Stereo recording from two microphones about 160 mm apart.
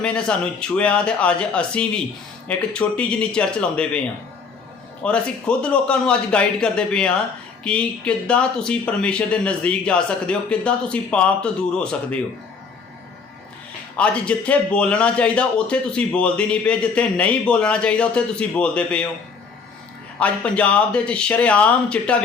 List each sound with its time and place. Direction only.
0.0 s a man's voice: 5° left (ahead or behind)
5.0 s a man's voice: 5° left (ahead or behind)
13.9 s a man's voice: 5° left (ahead or behind)
20.1 s a man's voice: 10° left (ahead or behind)